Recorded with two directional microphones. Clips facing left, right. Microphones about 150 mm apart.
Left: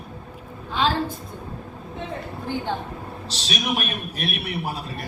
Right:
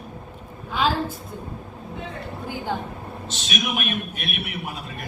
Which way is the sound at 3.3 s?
35° left (ahead or behind).